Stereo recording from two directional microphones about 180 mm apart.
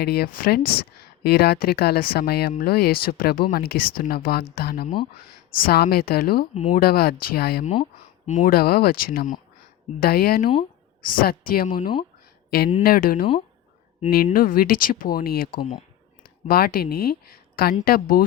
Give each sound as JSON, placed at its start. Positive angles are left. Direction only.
{"t": 0.0, "sound": "speech", "side_deg": 60}
{"t": 6.5, "sound": "speech", "side_deg": 35}
{"t": 6.7, "sound": "speech", "side_deg": 55}
{"t": 7.6, "sound": "speech", "side_deg": 30}
{"t": 8.3, "sound": "speech", "side_deg": 50}
{"t": 14.3, "sound": "speech", "side_deg": 55}
{"t": 16.5, "sound": "speech", "side_deg": 55}